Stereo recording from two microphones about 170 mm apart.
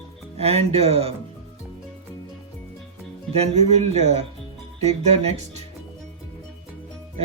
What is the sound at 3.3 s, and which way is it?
Speech, 40° right (ahead or behind).